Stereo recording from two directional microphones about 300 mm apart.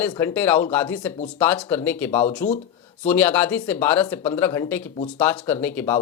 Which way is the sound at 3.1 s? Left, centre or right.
Centre.